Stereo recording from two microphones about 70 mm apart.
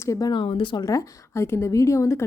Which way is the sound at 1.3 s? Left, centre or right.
Left.